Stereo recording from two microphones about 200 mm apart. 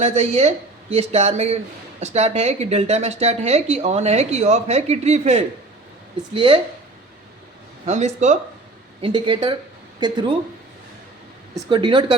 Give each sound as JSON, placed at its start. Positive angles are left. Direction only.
{"t": 0.0, "sound": "speech", "side_deg": -35}
{"t": 7.9, "sound": "speech", "side_deg": -35}
{"t": 11.5, "sound": "speech", "side_deg": -25}